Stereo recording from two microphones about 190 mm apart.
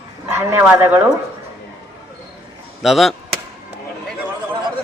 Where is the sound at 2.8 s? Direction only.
Centre (ahead or behind).